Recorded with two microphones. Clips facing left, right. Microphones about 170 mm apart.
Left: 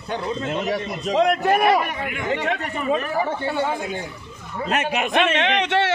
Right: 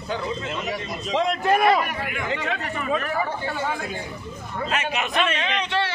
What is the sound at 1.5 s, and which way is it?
Speech, 10° left (ahead or behind).